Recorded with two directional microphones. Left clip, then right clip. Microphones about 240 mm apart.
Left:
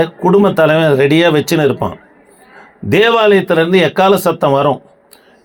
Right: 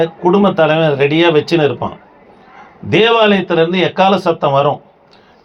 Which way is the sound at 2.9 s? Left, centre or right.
Left.